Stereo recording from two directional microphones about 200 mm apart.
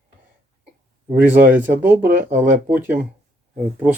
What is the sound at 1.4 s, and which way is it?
Speech, 10° right (ahead or behind).